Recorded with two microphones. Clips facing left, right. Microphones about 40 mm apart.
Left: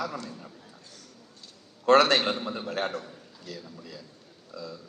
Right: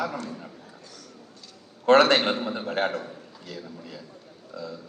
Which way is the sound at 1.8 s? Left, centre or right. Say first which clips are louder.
Right 2 dB; right.